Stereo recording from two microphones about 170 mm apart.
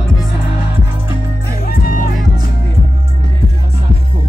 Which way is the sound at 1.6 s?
60° left (ahead or behind).